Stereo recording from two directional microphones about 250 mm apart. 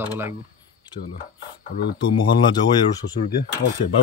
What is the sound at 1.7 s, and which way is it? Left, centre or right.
Speech, left.